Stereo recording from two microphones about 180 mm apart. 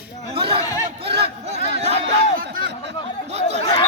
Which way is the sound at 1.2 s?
35° right (ahead or behind).